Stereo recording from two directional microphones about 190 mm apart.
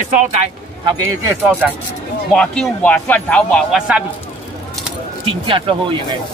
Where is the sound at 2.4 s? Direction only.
5° left (ahead or behind).